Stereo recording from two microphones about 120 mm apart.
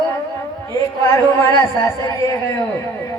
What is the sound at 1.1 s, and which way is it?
Speech, 20° left (ahead or behind).